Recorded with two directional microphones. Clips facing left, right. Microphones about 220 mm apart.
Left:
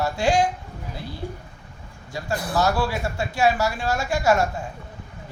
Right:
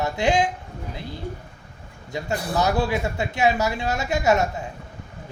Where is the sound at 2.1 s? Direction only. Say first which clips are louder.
Right 1 dB; 20° right (ahead or behind).